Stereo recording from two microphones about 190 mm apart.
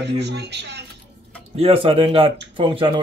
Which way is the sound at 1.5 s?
30° right (ahead or behind).